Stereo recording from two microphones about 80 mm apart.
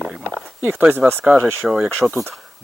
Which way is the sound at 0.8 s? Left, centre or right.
Right.